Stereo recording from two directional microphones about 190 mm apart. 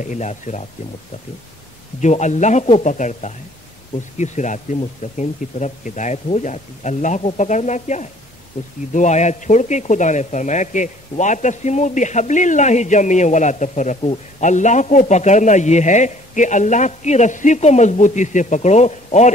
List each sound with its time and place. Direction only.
0.0 s a man's voice: 40° left (ahead or behind)
2.0 s a man's voice: 40° left (ahead or behind)